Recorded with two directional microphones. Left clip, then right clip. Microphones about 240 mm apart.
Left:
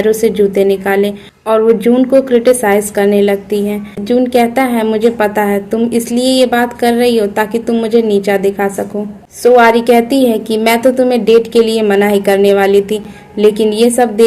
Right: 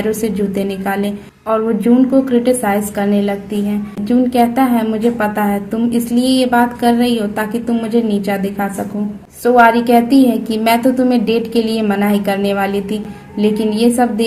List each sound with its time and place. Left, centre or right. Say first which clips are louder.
0.0 s a woman's voice: left 8 dB; left